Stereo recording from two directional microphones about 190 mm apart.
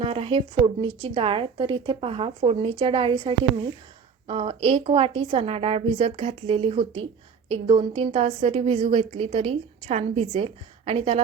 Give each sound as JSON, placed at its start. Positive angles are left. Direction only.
{"t": 0.0, "sound": "a woman's voice", "side_deg": -30}